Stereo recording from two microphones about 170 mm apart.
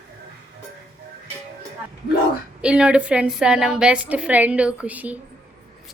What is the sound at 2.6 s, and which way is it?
A woman's voice, 5° right (ahead or behind).